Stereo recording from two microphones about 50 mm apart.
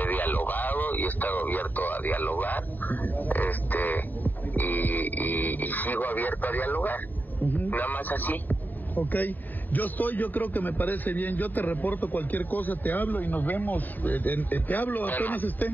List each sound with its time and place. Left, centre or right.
0.0 s radio: left